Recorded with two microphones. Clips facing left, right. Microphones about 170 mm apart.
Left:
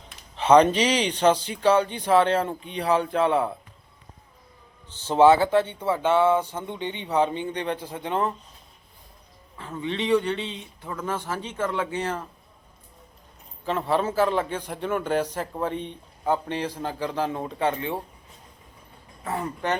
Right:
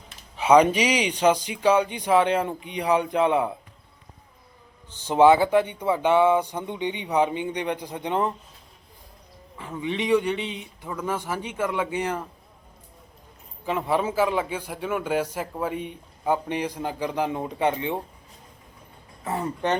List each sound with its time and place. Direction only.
0.3 s a man's voice: 10° right (ahead or behind)
4.9 s a man's voice: 15° right (ahead or behind)
9.6 s a man's voice: 15° right (ahead or behind)
13.7 s a man's voice: 10° right (ahead or behind)
19.2 s speech: 20° right (ahead or behind)